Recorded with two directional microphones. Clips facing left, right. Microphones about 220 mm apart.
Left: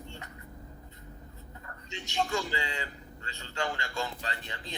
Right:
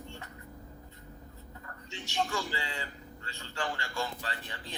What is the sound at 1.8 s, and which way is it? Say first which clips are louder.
Speech: left 2 dB; 20° left (ahead or behind).